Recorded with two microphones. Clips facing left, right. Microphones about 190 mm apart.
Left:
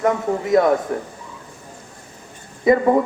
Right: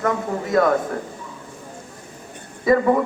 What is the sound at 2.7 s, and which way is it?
Speech, 20° left (ahead or behind).